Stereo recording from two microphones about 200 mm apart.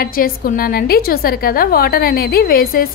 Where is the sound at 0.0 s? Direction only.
45° left (ahead or behind).